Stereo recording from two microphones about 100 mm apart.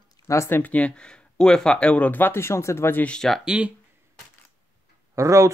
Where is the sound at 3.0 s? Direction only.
5° left (ahead or behind).